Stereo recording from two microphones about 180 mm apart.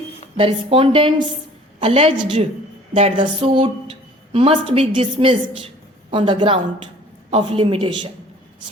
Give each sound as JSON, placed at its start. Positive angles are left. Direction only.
{"t": 0.3, "sound": "a woman's voice", "side_deg": -30}